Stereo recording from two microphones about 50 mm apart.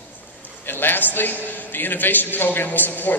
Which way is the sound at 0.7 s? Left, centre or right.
Left.